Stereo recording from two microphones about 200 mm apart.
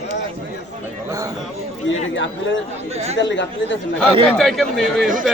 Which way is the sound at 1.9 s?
65° left (ahead or behind).